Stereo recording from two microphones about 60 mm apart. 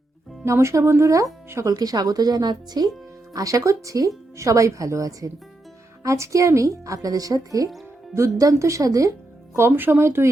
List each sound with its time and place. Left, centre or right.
0.4 s a woman's voice: right
1.7 s speech: right
3.3 s a woman's voice: right
8.1 s a woman's voice: right
9.6 s speech: right